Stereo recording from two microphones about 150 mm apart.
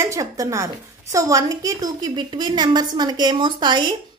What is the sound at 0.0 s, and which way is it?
A woman's voice, 20° right (ahead or behind).